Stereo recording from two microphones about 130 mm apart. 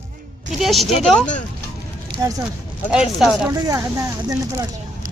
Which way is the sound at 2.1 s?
40° right (ahead or behind).